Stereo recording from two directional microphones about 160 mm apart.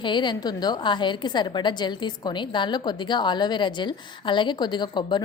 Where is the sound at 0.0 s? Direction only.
30° left (ahead or behind).